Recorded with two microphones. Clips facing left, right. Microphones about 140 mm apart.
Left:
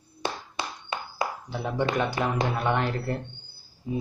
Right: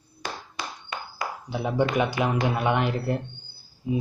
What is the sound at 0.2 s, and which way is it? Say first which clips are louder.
Clapping: left 3 dB; 25° left (ahead or behind).